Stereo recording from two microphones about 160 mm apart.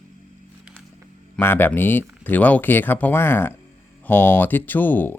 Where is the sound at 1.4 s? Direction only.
15° left (ahead or behind).